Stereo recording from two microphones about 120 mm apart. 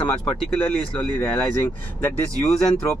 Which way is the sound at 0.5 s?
5° left (ahead or behind).